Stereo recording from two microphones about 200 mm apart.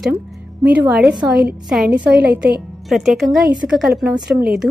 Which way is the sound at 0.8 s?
5° right (ahead or behind).